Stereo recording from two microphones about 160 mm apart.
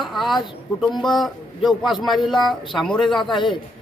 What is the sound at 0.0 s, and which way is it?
Speech, centre (ahead or behind).